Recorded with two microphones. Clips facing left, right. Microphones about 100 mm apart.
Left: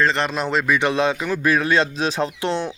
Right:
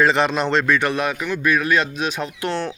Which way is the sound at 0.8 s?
20° left (ahead or behind).